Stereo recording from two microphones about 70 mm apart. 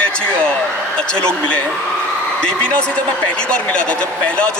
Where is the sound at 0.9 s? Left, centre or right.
Centre.